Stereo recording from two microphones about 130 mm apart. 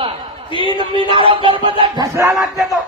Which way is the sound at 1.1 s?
40° right (ahead or behind).